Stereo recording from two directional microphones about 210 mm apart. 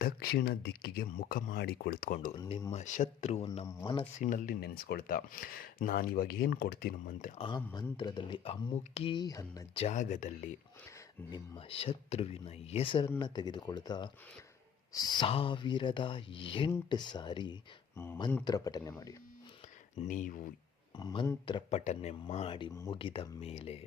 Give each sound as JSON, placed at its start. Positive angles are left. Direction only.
{"t": 0.0, "sound": "speech", "side_deg": 45}
{"t": 2.3, "sound": "speech", "side_deg": 20}
{"t": 2.7, "sound": "speech", "side_deg": 35}
{"t": 7.3, "sound": "speech", "side_deg": 20}
{"t": 9.8, "sound": "speech", "side_deg": 35}
{"t": 11.3, "sound": "speech", "side_deg": 20}
{"t": 20.0, "sound": "speech", "side_deg": 35}
{"t": 20.9, "sound": "speech", "side_deg": 20}